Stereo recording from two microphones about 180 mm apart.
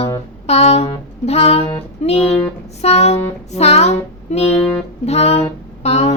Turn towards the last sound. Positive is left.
turn(degrees=35)  # may be behind; listen again after turning